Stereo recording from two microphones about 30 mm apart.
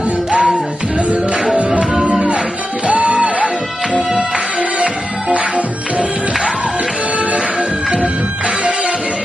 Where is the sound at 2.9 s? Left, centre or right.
Right.